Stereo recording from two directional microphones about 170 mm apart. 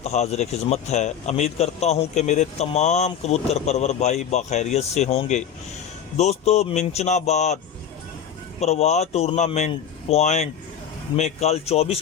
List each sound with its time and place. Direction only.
0.0 s speech: 40° left (ahead or behind)
8.6 s speech: 40° left (ahead or behind)